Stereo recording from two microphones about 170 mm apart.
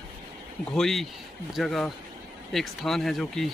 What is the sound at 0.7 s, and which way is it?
Speech, centre (ahead or behind).